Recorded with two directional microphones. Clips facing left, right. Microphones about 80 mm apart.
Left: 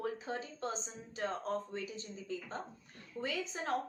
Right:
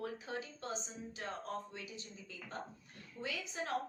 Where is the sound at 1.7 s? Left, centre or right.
Left.